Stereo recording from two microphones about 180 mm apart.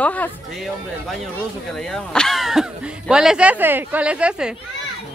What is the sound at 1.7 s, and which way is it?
Speech, 5° left (ahead or behind).